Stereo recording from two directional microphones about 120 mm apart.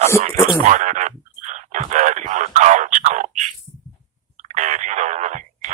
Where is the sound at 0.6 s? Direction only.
90° right.